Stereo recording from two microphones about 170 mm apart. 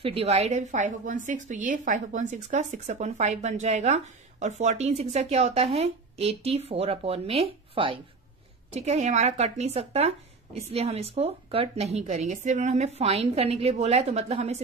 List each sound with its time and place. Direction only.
0.0 s a woman's voice: 35° right (ahead or behind)